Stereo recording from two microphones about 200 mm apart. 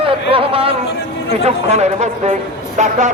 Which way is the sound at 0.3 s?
25° right (ahead or behind).